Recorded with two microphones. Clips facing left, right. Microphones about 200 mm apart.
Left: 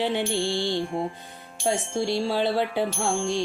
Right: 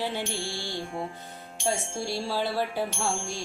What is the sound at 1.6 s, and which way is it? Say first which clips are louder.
Music: left 5 dB; 20° left (ahead or behind).